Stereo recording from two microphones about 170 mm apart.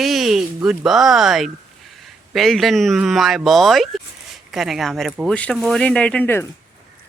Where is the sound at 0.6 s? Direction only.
Centre (ahead or behind).